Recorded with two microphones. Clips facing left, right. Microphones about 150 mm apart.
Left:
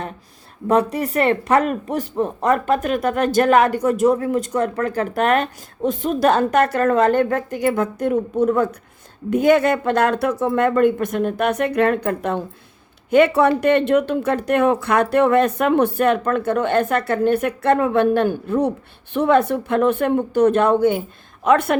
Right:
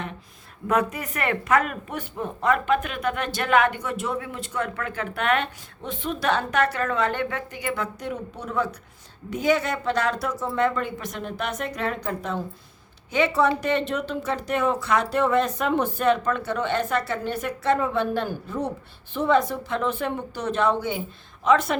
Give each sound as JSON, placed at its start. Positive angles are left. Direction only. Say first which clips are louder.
{"t": 0.7, "sound": "speech", "louder": "left 6 dB", "side_deg": 35}